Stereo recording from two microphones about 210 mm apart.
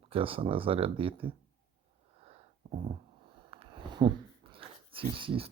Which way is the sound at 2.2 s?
30° right (ahead or behind).